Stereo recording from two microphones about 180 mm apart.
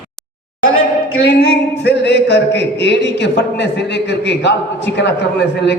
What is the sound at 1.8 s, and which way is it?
A man's voice, 70° left (ahead or behind).